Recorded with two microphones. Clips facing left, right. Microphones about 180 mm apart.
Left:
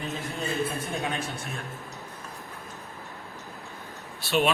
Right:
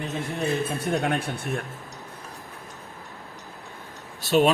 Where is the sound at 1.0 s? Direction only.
55° right (ahead or behind).